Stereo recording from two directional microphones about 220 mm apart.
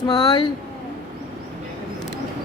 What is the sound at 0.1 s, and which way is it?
Speech, 20° left (ahead or behind).